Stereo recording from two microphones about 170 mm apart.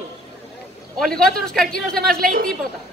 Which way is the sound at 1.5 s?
60° right (ahead or behind).